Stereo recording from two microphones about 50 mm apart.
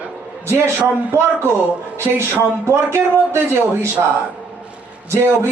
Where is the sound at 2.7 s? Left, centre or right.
Right.